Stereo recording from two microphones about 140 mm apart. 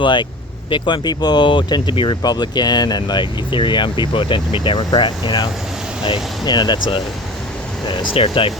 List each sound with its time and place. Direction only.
0.0 s speech: 35° left (ahead or behind)